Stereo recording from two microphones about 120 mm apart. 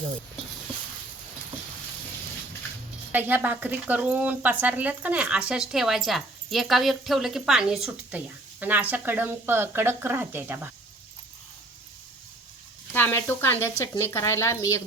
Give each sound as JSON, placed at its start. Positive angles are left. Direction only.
{"t": 3.1, "sound": "speech", "side_deg": -15}
{"t": 12.9, "sound": "speech", "side_deg": 20}